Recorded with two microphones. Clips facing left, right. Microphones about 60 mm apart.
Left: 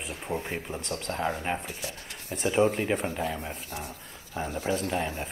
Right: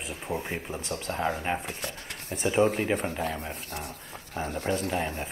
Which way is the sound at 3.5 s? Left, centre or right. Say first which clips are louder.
Even; right.